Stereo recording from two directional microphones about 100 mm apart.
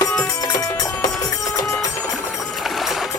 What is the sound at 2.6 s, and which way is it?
Vehicle, centre (ahead or behind).